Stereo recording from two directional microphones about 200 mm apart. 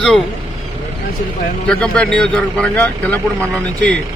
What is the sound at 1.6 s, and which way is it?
A man's voice, 5° left (ahead or behind).